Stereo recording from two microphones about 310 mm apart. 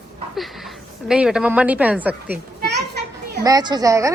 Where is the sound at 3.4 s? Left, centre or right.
Centre.